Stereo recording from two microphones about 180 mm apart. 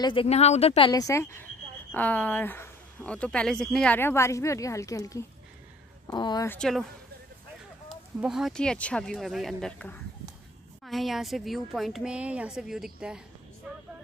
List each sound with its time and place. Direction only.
0.0 s speech: 30° left (ahead or behind)
0.9 s speech: 15° left (ahead or behind)
6.5 s a woman's voice: 5° left (ahead or behind)
7.9 s a woman's voice: 5° right (ahead or behind)